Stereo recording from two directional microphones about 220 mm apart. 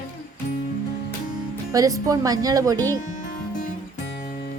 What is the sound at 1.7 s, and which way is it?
A woman's voice, 15° right (ahead or behind).